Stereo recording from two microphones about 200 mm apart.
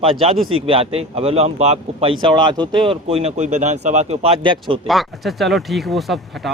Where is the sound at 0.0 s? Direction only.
30° right (ahead or behind).